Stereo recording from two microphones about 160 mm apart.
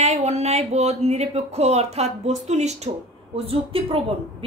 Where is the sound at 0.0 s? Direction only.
45° right (ahead or behind).